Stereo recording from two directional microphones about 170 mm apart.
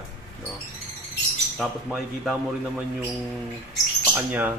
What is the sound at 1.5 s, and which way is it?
A man's voice, centre (ahead or behind).